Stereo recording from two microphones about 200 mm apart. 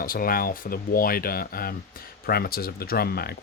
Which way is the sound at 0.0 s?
45° left (ahead or behind).